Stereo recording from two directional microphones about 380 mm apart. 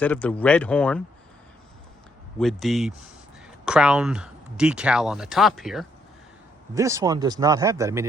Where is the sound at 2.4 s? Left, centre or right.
Centre.